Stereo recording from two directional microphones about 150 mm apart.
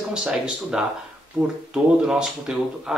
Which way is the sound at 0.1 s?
5° right (ahead or behind).